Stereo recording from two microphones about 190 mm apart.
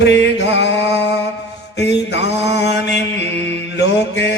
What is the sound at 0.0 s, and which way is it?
Music, 65° left (ahead or behind).